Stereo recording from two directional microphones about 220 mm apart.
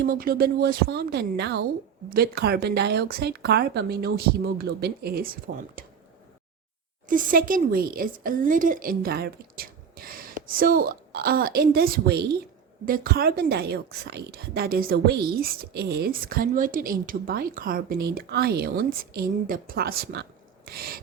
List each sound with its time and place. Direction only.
0.0 s a woman's voice: 40° right (ahead or behind)
7.1 s a woman's voice: 40° right (ahead or behind)